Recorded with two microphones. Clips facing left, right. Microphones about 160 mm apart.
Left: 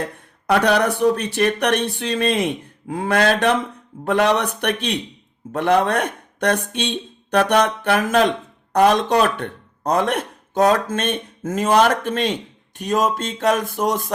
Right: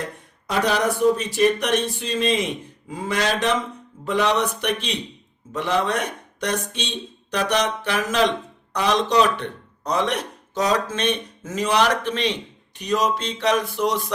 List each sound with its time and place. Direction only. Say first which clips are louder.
0.4 s speech: left 4 dB; 65° left (ahead or behind); by 14.1 s 50° left (ahead or behind)